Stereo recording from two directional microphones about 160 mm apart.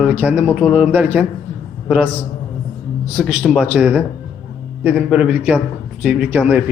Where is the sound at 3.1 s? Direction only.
Centre (ahead or behind).